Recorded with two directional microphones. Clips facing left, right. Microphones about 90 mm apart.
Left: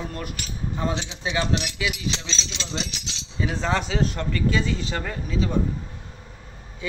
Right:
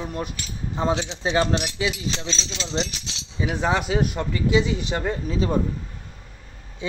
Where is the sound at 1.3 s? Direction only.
40° right (ahead or behind).